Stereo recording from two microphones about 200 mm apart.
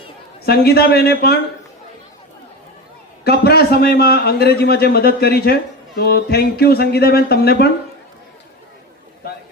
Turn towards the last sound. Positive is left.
turn(degrees=55)  # may be behind; listen again after turning